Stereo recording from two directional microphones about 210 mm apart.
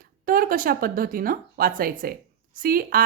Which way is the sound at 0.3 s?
40° right (ahead or behind).